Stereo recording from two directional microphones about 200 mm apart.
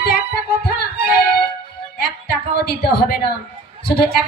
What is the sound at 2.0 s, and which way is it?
A woman's voice, 55° left (ahead or behind).